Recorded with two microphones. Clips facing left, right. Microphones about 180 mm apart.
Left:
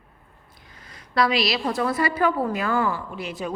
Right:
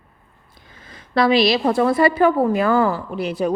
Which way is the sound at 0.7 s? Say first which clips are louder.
Right 3 dB; 25° right (ahead or behind).